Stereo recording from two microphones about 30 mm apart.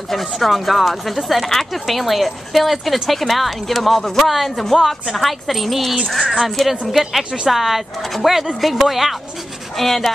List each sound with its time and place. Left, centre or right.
0.1 s speech: centre
6.0 s speech: centre
6.9 s speech: centre
9.8 s speech: centre